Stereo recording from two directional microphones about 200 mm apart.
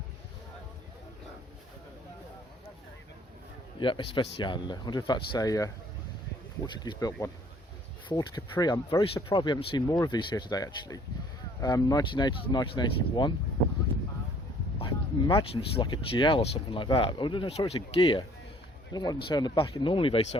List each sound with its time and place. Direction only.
3.8 s speech: 25° left (ahead or behind)
6.8 s speech: 20° left (ahead or behind)
14.8 s speech: 25° left (ahead or behind)